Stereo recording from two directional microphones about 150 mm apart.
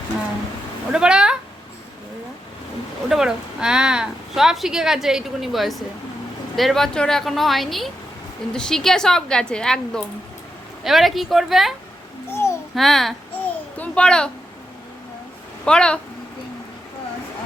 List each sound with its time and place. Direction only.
0.9 s speech: 5° right (ahead or behind)
3.1 s speech: 5° right (ahead or behind)
12.3 s babbling: 15° left (ahead or behind)
12.7 s babbling: centre (ahead or behind)
15.6 s speech: 5° left (ahead or behind)